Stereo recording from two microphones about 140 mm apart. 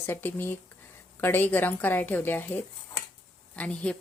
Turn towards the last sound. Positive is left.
turn(degrees=10)  # may be behind; listen again after turning